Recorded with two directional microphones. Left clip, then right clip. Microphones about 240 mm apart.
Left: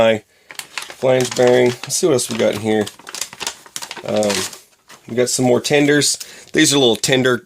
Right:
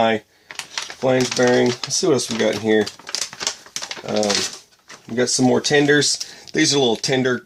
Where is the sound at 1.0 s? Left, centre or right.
Left.